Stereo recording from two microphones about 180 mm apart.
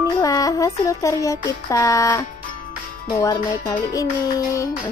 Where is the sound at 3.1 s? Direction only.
20° left (ahead or behind).